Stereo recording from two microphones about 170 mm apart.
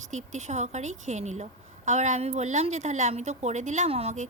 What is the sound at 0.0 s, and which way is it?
Speech, 45° right (ahead or behind).